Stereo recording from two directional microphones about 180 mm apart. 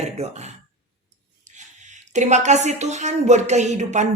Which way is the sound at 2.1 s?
40° right (ahead or behind).